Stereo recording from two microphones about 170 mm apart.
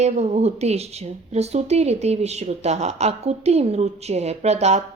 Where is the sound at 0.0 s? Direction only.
40° right (ahead or behind).